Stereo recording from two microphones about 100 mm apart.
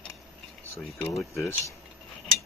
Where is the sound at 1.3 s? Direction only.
30° left (ahead or behind).